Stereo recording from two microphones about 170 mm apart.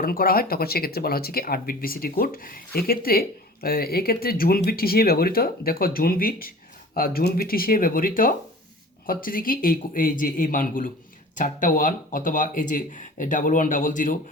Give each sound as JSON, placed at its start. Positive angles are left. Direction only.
{"t": 0.0, "sound": "speech", "side_deg": 60}